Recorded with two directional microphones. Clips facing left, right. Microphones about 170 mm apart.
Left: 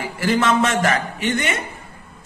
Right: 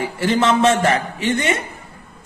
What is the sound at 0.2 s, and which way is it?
A woman's voice, 30° right (ahead or behind).